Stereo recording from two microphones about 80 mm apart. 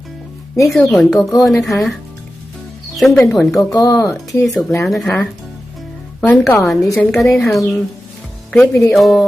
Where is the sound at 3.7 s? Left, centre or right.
Left.